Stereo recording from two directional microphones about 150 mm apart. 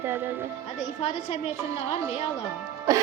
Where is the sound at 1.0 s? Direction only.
45° left (ahead or behind).